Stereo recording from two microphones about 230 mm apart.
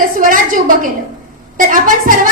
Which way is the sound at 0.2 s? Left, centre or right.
Right.